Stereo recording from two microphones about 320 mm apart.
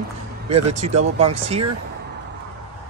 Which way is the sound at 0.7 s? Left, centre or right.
Right.